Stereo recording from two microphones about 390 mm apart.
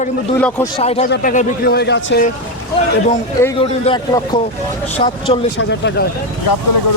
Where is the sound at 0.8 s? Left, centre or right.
Centre.